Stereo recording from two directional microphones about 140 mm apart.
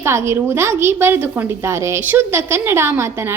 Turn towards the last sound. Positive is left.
turn(degrees=-20)  # may be behind; listen again after turning